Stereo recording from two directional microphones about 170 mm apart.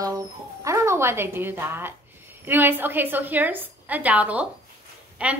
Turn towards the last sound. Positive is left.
turn(degrees=-5)  # may be behind; listen again after turning